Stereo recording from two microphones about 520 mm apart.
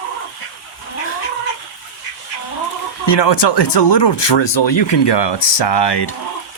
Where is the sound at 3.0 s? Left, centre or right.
Left.